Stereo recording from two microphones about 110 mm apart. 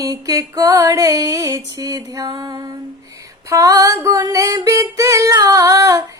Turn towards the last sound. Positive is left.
turn(degrees=-30)  # may be behind; listen again after turning